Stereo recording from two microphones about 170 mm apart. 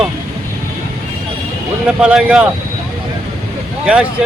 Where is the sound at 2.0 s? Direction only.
5° right (ahead or behind).